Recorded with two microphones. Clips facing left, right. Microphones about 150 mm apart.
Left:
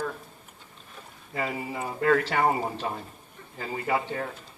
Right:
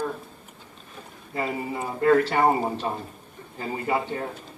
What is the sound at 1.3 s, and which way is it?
A man's voice, 35° right (ahead or behind).